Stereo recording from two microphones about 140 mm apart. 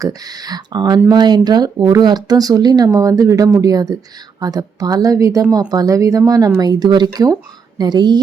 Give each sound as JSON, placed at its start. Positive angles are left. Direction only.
{"t": 0.0, "sound": "speech", "side_deg": -25}